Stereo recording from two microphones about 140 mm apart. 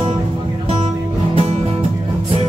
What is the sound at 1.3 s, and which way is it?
Music, 50° right (ahead or behind).